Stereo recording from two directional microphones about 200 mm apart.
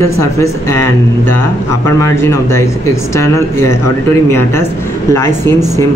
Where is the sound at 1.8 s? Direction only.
10° left (ahead or behind).